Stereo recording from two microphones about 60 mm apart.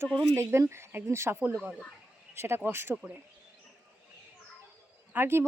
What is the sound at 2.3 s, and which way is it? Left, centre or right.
Speech, right.